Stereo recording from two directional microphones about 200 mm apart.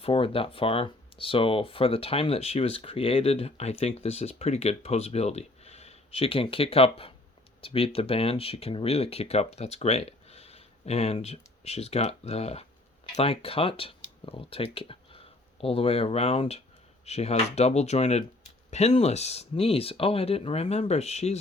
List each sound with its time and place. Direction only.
0.0 s speech: 25° left (ahead or behind)